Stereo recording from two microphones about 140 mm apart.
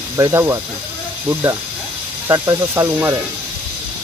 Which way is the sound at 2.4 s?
15° right (ahead or behind).